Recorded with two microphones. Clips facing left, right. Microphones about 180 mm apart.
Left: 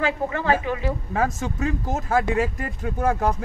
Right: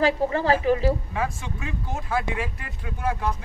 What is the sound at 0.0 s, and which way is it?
Speech, 35° right (ahead or behind).